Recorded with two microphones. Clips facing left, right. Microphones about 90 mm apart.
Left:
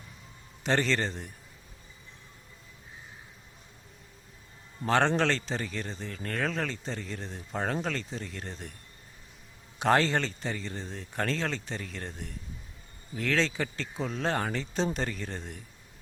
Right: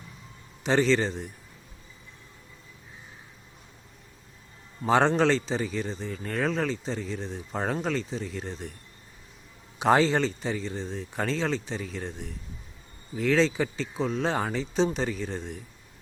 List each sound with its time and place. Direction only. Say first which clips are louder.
0.6 s a man's voice: right 5 dB; centre (ahead or behind)
4.8 s a man's voice: right 3 dB; 5° right (ahead or behind)
9.7 s a man's voice: right 3 dB; 5° right (ahead or behind)